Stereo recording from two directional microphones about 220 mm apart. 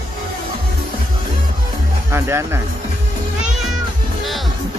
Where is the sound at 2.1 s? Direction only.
10° right (ahead or behind).